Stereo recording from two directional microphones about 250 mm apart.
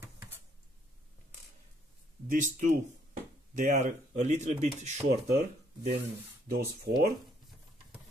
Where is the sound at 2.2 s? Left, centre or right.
Right.